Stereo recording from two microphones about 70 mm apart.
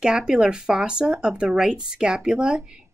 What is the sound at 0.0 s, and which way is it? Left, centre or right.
Speech, centre.